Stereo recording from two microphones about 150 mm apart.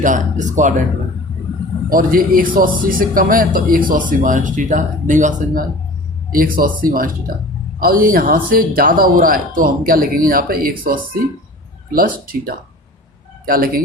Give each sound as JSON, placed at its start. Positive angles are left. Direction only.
{"t": 0.0, "sound": "speech", "side_deg": -60}
{"t": 1.9, "sound": "speech", "side_deg": -70}
{"t": 6.3, "sound": "speech", "side_deg": -70}